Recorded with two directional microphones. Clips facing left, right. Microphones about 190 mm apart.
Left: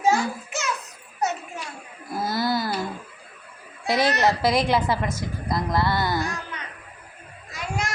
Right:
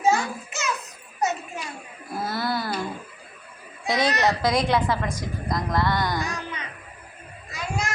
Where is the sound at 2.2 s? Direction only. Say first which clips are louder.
Left 3 dB; 35° left (ahead or behind).